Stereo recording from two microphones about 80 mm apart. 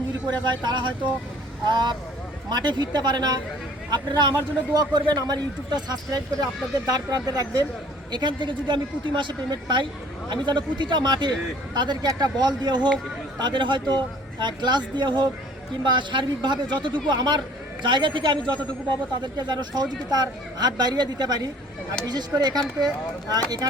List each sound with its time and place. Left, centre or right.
0.6 s speech: right
8.1 s speech: right
17.8 s speech: right
19.2 s speech: right